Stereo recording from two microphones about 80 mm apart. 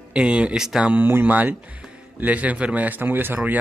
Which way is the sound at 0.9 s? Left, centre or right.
Right.